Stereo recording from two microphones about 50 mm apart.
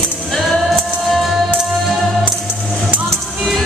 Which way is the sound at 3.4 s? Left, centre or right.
Centre.